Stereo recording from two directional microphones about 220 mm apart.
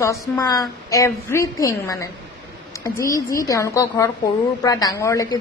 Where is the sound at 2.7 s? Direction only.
15° left (ahead or behind).